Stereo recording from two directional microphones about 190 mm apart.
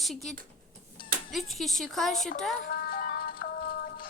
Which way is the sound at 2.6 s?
50° left (ahead or behind).